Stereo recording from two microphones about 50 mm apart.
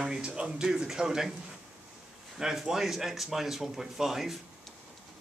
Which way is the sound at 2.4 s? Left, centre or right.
Centre.